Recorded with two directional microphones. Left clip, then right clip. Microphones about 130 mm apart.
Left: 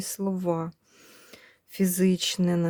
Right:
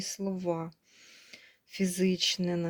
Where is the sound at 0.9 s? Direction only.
60° left (ahead or behind).